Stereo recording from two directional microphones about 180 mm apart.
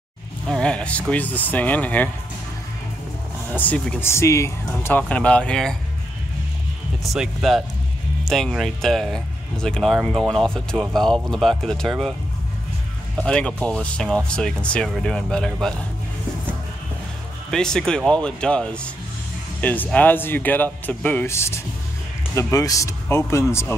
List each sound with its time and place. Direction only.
0.5 s speech: 5° left (ahead or behind)
3.5 s speech: 10° left (ahead or behind)
7.0 s speech: centre (ahead or behind)
13.2 s speech: 5° left (ahead or behind)
17.5 s speech: 5° left (ahead or behind)